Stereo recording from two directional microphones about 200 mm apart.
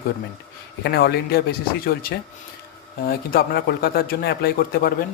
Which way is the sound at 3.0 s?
50° left (ahead or behind).